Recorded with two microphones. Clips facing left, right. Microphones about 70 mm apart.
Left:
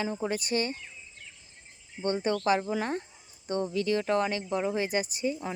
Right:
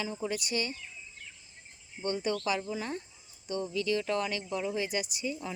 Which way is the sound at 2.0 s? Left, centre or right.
Left.